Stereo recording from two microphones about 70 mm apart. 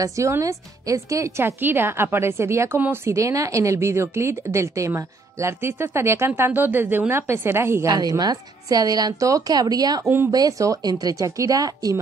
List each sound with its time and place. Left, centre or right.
0.0 s a woman's voice: right
1.4 s a woman's voice: right
7.8 s a woman's voice: right
10.0 s a woman's voice: right
10.3 s speech: right